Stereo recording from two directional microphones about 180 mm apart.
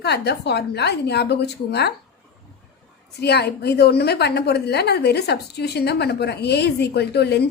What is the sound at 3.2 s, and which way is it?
A woman's voice, 65° left (ahead or behind).